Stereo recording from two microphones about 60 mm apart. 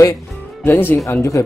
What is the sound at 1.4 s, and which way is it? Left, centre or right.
Speech, left.